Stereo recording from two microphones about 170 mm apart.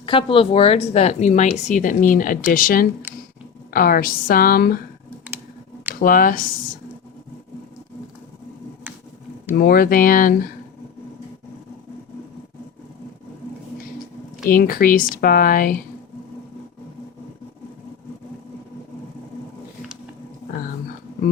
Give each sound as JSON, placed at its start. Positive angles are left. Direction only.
{"t": 0.0, "sound": "a woman's voice", "side_deg": 30}
{"t": 5.9, "sound": "speech", "side_deg": 55}
{"t": 9.6, "sound": "a woman's voice", "side_deg": 60}
{"t": 14.5, "sound": "a woman's voice", "side_deg": 60}